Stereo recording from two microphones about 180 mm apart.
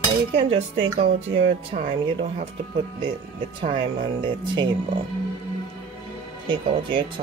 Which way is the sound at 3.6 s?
25° right (ahead or behind).